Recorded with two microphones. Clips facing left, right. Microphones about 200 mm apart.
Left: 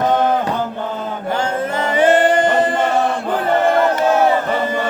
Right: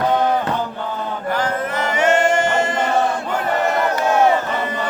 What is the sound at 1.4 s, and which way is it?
Music, 30° left (ahead or behind).